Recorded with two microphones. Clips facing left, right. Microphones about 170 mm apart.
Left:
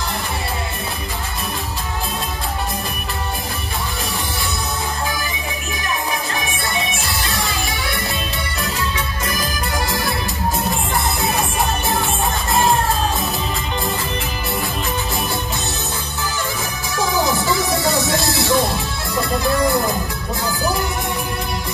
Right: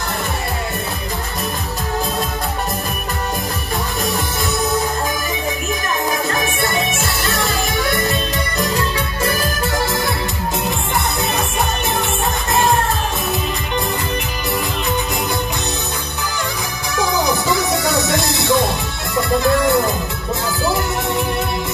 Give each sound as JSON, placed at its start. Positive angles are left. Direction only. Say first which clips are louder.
{"t": 8.5, "sound": "music", "louder": "right 4 dB", "side_deg": -35}
{"t": 17.2, "sound": "music", "louder": "right 1 dB", "side_deg": -20}